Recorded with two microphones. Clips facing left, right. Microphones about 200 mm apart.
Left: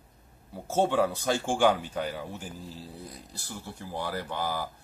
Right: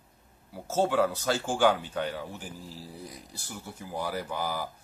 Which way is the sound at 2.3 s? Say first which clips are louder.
Left 1 dB; 10° right (ahead or behind).